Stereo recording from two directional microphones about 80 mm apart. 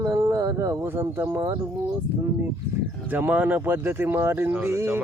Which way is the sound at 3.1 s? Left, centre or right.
Right.